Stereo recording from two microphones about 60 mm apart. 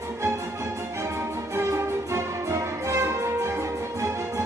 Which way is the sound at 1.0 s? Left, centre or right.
Right.